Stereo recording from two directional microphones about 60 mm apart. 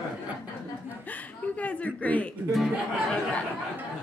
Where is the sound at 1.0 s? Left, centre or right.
Left.